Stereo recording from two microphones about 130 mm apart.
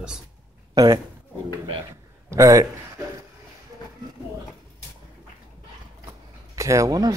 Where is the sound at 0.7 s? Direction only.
30° right (ahead or behind).